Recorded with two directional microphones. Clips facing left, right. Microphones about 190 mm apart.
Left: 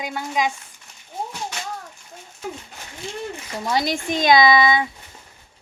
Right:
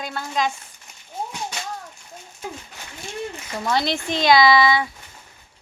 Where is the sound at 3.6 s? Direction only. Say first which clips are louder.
Even; 10° left (ahead or behind).